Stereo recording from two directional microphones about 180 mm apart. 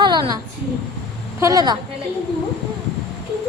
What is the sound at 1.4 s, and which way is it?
Speech, 20° right (ahead or behind).